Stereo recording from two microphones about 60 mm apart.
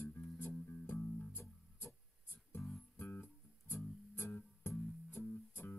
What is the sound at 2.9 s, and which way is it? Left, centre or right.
Music, left.